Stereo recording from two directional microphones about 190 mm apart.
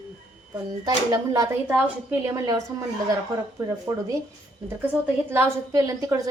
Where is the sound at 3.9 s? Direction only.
15° right (ahead or behind).